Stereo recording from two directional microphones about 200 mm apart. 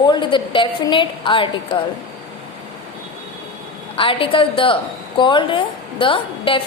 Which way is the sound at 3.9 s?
25° left (ahead or behind).